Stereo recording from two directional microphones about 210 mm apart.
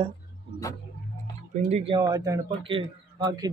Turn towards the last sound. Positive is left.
turn(degrees=-20)  # may be behind; listen again after turning